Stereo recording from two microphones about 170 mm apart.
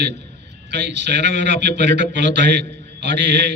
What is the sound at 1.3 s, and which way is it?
A man's voice, 90° right.